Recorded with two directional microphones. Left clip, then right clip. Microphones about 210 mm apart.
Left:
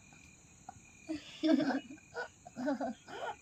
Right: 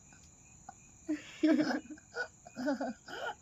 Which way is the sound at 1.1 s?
40° right (ahead or behind).